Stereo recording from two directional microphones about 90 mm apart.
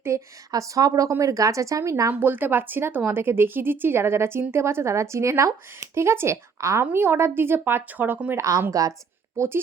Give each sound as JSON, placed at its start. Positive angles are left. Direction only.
{"t": 0.0, "sound": "a woman's voice", "side_deg": -35}
{"t": 2.2, "sound": "a woman's voice", "side_deg": -20}
{"t": 8.4, "sound": "speech", "side_deg": -40}